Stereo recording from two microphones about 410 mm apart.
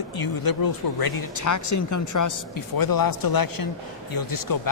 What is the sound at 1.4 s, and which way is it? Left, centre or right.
Speech, left.